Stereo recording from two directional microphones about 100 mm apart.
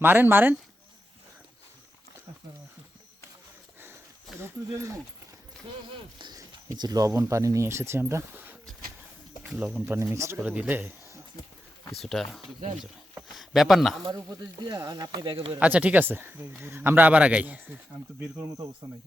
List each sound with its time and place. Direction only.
0.0 s speech: 20° right (ahead or behind)
4.4 s speech: 30° right (ahead or behind)
6.1 s a sound: 45° right (ahead or behind)
6.7 s speech: 40° right (ahead or behind); by 8.5 s 20° right (ahead or behind)
9.6 s speech: 5° right (ahead or behind)
9.9 s speech: 25° right (ahead or behind)
10.3 s speech: 15° right (ahead or behind)
12.0 s speech: 5° left (ahead or behind)
14.6 s speech: 45° right (ahead or behind)
15.5 s speech: 15° right (ahead or behind)
18.8 s speech: 45° right (ahead or behind)